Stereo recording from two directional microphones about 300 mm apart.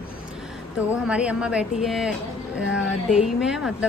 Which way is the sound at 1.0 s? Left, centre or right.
Centre.